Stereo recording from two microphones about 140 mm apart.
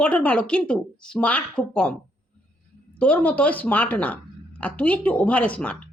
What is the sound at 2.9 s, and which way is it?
Speech, 10° left (ahead or behind).